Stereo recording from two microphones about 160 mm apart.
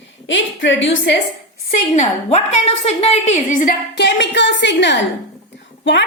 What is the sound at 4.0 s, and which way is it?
A woman's voice, 90° left.